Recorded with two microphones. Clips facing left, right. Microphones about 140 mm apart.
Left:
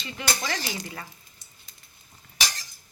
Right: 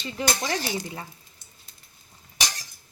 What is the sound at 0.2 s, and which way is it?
Speech, 35° right (ahead or behind).